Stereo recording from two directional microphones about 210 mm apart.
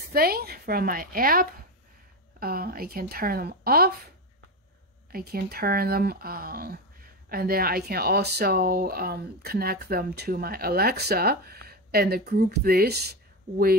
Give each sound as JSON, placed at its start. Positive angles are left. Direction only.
{"t": 0.1, "sound": "speech", "side_deg": -45}
{"t": 5.1, "sound": "speech", "side_deg": -45}